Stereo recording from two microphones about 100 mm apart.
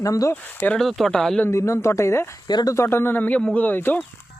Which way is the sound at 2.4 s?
45° left (ahead or behind).